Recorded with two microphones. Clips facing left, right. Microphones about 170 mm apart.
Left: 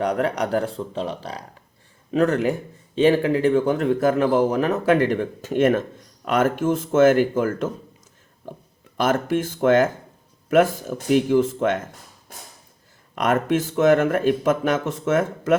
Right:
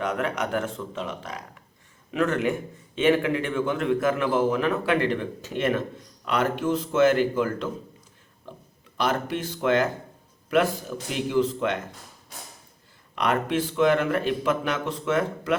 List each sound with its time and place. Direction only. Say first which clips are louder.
0.0 s speech: left 5 dB; 35° left (ahead or behind)
9.0 s speech: left 5 dB; 45° left (ahead or behind)
13.1 s speech: left 4 dB; 45° left (ahead or behind)